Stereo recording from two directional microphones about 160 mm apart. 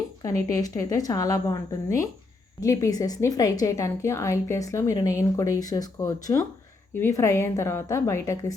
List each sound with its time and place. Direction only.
0.2 s a woman's voice: 20° left (ahead or behind)